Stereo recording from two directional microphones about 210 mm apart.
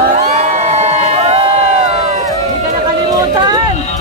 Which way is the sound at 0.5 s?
30° right (ahead or behind).